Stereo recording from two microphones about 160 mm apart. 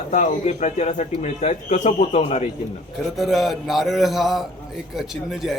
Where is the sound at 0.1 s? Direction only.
50° left (ahead or behind).